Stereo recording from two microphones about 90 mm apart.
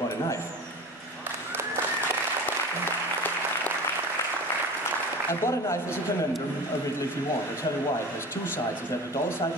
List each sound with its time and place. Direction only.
5.3 s speech: 30° left (ahead or behind)